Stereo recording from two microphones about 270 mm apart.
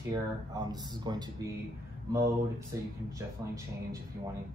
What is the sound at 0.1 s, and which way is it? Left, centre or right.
Speech, centre.